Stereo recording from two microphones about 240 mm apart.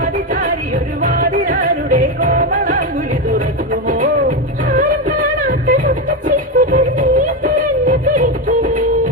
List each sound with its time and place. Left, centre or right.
1.0 s music: right